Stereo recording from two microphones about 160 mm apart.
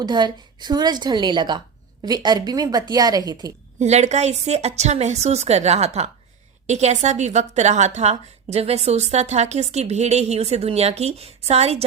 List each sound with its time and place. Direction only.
0.0 s a woman's voice: 25° right (ahead or behind)
3.8 s a woman's voice: 45° right (ahead or behind)